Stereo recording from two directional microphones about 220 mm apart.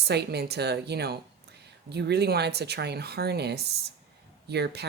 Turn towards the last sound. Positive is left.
turn(degrees=-50)  # may be behind; listen again after turning